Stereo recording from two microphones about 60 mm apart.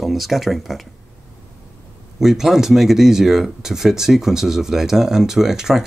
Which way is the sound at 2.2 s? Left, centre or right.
Centre.